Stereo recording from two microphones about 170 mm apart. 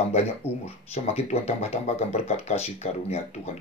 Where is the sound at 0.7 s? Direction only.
40° left (ahead or behind).